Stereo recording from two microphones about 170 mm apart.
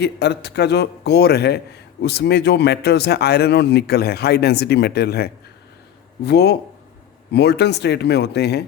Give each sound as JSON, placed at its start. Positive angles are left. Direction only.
{"t": 0.0, "sound": "a man's voice", "side_deg": 75}